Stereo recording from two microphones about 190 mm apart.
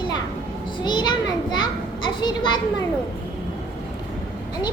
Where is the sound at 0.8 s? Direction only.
25° left (ahead or behind).